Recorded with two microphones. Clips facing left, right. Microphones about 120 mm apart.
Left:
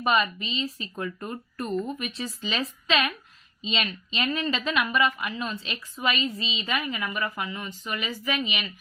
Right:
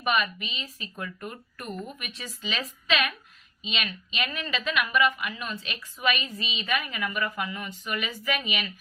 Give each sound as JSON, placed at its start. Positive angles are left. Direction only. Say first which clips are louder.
{"t": 0.0, "sound": "a woman's voice", "louder": "left 3 dB", "side_deg": 25}